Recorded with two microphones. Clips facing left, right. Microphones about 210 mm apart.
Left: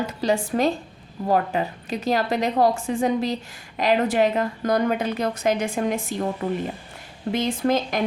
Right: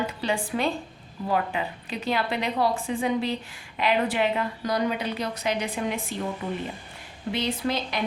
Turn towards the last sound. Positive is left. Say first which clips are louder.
# left 6 dB
turn(degrees=45)  # may be behind; listen again after turning